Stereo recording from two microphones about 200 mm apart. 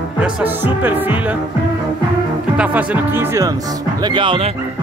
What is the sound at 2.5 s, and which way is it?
Music, 5° right (ahead or behind).